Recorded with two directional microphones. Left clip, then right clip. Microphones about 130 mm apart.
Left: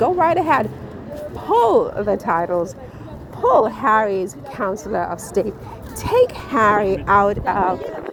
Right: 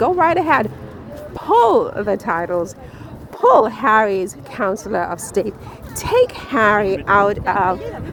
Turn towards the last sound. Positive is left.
turn(degrees=-35)  # may be behind; listen again after turning